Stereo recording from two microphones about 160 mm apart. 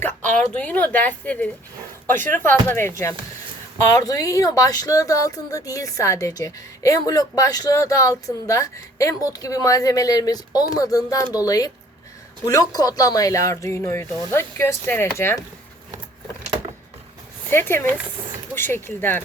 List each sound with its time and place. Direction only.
0.0 s a woman's voice: 10° left (ahead or behind)
17.5 s speech: 15° left (ahead or behind)